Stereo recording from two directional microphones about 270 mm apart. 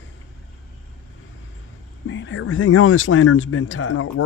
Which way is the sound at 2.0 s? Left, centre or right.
Left.